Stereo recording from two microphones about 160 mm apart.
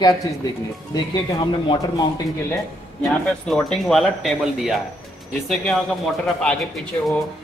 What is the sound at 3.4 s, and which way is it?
Speech, 5° left (ahead or behind).